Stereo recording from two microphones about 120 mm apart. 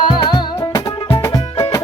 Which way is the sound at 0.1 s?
40° left (ahead or behind).